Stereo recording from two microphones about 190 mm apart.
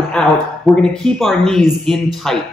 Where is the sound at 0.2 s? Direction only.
5° left (ahead or behind).